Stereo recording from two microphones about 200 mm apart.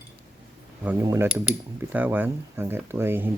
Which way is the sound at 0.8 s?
10° right (ahead or behind).